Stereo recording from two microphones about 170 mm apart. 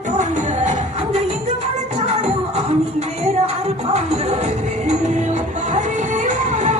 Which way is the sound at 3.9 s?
40° right (ahead or behind).